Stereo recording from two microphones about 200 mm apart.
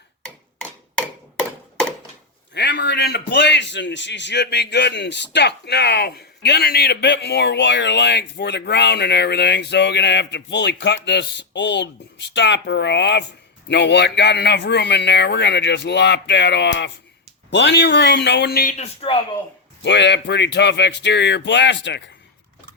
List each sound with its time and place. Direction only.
2.5 s a man's voice: 55° left (ahead or behind)
19.8 s a man's voice: 60° left (ahead or behind)